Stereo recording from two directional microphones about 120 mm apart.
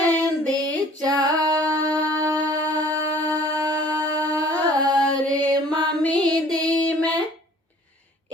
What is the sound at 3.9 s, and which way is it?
Music, 15° left (ahead or behind).